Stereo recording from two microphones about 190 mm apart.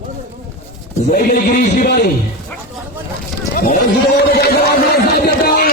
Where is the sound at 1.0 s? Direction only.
50° left (ahead or behind).